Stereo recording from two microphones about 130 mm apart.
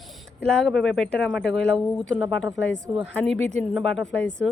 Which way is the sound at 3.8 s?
Centre (ahead or behind).